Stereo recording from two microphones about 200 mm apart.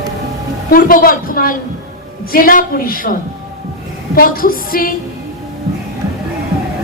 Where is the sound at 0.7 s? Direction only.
45° left (ahead or behind).